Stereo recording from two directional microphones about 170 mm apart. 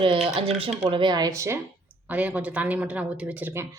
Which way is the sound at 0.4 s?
35° right (ahead or behind).